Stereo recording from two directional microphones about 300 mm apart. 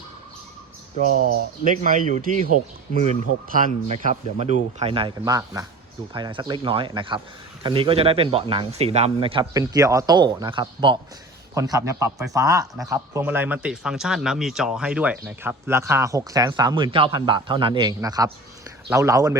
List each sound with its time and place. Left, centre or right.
1.1 s speech: left
1.6 s a man's voice: right; by 19.4 s centre